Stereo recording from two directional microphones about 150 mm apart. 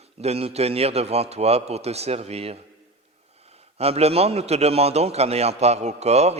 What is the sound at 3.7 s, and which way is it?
A man's voice, 45° right (ahead or behind).